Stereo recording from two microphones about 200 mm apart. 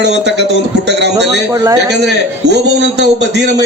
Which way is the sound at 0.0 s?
60° right (ahead or behind).